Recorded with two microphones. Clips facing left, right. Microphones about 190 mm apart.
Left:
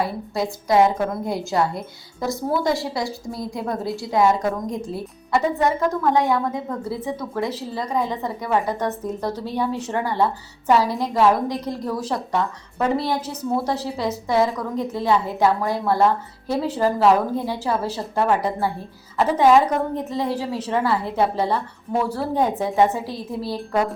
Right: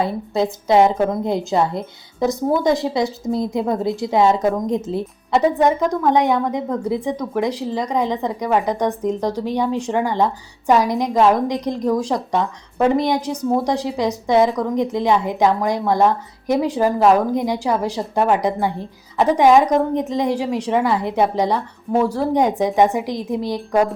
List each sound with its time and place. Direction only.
0.7 s a woman's voice: 20° right (ahead or behind)